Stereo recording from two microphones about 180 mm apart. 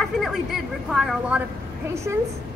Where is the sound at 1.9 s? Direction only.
15° right (ahead or behind).